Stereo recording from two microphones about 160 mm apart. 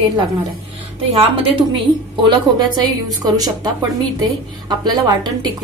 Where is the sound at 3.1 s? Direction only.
25° right (ahead or behind).